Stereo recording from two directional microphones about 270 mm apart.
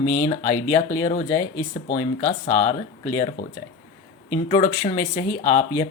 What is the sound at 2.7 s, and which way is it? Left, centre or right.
Speech, left.